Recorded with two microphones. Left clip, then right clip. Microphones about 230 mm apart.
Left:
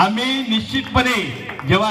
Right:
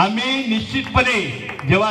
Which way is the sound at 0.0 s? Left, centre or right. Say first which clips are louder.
Left 1 dB; left.